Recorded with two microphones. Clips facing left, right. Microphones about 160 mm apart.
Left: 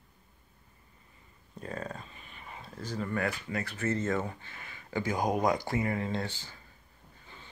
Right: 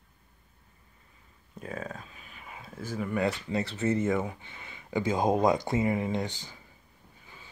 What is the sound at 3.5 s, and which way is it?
Speech, 25° right (ahead or behind).